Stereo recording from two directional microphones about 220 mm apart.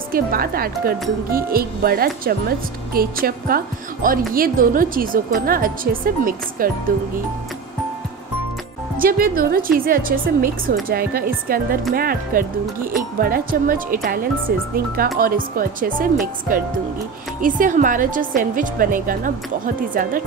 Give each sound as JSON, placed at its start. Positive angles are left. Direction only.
{"t": 0.1, "sound": "a woman's voice", "side_deg": -40}
{"t": 8.9, "sound": "a woman's voice", "side_deg": -40}
{"t": 17.4, "sound": "a woman's voice", "side_deg": -35}